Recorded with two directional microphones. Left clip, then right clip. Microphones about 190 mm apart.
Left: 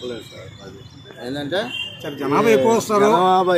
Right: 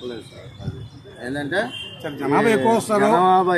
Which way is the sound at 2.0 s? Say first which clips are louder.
Even; 15° right (ahead or behind).